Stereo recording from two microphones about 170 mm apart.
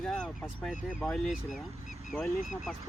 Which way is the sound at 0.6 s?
5° left (ahead or behind).